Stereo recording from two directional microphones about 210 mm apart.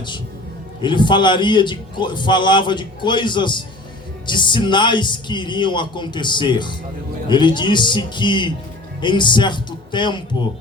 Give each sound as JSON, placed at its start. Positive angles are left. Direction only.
{"t": 0.8, "sound": "a man's voice", "side_deg": 20}